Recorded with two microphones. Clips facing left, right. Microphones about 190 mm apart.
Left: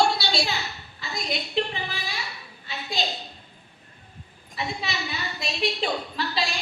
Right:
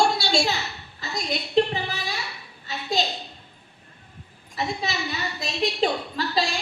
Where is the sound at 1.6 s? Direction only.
40° right (ahead or behind).